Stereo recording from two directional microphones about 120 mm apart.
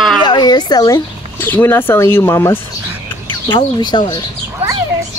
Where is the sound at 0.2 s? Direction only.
35° left (ahead or behind).